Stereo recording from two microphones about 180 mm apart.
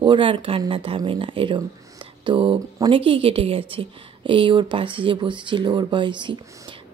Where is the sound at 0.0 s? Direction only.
25° right (ahead or behind).